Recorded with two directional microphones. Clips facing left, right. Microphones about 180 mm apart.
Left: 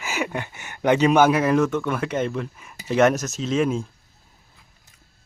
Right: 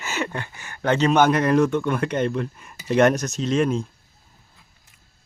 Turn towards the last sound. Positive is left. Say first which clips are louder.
# right 1 dB
turn(degrees=5)  # may be behind; listen again after turning